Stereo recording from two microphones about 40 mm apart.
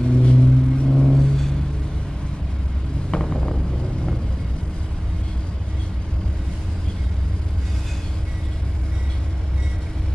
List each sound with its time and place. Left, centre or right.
0.0 s vehicle: left
1.0 s vehicle: centre
3.1 s vehicle: centre